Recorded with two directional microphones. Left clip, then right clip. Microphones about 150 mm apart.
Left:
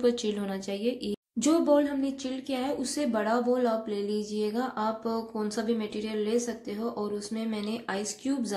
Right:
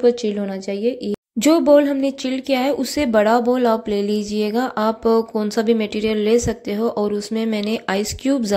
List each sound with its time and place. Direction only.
0.0 s speech: 35° right (ahead or behind); by 8.5 s 50° right (ahead or behind)